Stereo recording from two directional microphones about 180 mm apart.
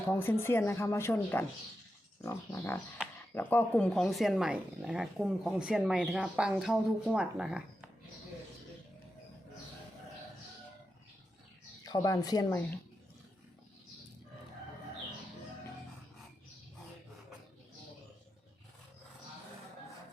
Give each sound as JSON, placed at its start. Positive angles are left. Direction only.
{"t": 0.1, "sound": "speech", "side_deg": 15}
{"t": 11.8, "sound": "speech", "side_deg": 20}